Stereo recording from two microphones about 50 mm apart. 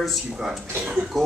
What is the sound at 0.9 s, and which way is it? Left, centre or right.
Speech, centre.